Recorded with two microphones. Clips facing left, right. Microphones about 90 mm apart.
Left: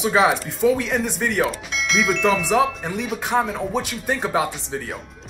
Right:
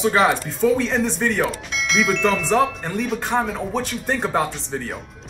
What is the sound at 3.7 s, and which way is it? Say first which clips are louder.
A man's voice: even; 10° left (ahead or behind).